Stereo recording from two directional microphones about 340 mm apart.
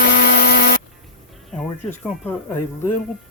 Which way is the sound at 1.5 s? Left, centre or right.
Centre.